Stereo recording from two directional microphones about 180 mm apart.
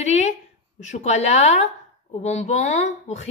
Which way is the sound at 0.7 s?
40° left (ahead or behind).